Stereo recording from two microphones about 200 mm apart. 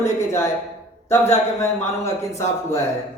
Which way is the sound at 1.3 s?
15° left (ahead or behind).